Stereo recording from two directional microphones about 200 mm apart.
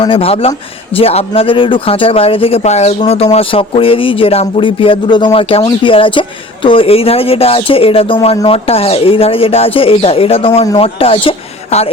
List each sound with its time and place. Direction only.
0.0 s speech: 25° left (ahead or behind)